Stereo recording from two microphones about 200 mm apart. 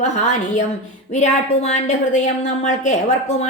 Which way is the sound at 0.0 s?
35° left (ahead or behind).